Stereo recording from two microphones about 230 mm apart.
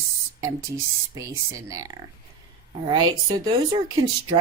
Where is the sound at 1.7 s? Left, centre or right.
Centre.